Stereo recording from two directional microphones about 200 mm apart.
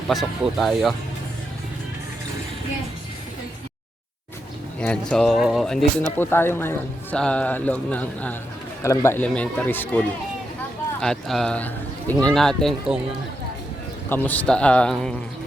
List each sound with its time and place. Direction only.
0.1 s a man's voice: centre (ahead or behind)
4.8 s speech: 5° left (ahead or behind)
11.0 s a man's voice: centre (ahead or behind)
14.1 s a man's voice: 10° left (ahead or behind)